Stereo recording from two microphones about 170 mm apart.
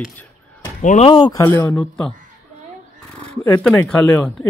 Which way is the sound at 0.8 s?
45° left (ahead or behind).